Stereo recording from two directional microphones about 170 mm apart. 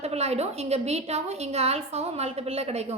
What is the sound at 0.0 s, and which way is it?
A woman's voice, 40° right (ahead or behind).